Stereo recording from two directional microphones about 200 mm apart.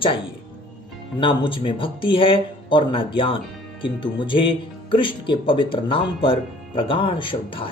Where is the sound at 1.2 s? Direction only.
25° left (ahead or behind).